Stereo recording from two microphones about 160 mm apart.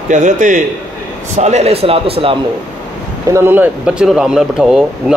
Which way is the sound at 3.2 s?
15° right (ahead or behind).